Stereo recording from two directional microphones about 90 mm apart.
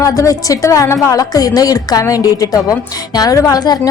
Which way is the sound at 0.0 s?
40° left (ahead or behind).